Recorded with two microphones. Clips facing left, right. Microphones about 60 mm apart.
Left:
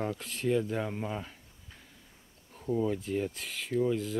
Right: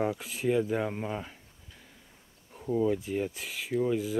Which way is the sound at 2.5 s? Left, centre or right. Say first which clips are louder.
Right 3 dB; centre.